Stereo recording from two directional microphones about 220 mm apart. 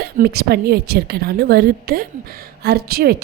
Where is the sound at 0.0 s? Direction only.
45° right (ahead or behind).